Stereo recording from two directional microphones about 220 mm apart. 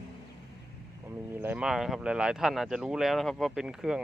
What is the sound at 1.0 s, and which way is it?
Speech, 10° right (ahead or behind).